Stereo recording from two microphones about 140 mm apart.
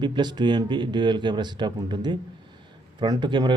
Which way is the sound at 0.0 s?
35° right (ahead or behind).